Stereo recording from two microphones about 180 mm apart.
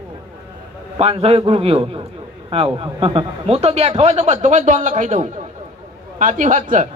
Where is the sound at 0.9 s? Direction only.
35° right (ahead or behind).